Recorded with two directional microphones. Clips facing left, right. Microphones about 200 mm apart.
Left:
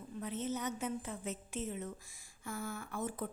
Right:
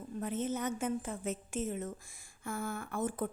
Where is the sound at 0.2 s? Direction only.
50° right (ahead or behind).